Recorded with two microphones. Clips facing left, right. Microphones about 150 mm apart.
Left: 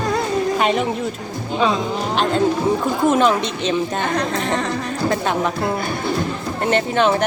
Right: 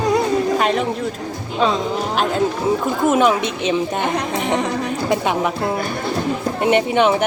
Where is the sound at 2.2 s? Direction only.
5° right (ahead or behind).